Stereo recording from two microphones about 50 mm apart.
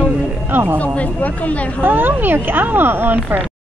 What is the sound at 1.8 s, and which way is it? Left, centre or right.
Speech, right.